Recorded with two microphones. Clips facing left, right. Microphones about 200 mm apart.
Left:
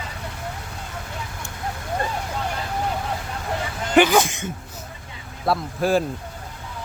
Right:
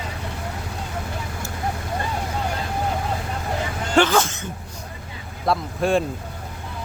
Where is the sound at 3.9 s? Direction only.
15° left (ahead or behind).